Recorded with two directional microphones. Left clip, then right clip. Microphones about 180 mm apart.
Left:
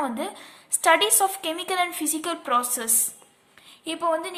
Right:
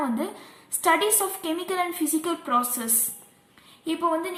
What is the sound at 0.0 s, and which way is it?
A woman's voice, 40° left (ahead or behind).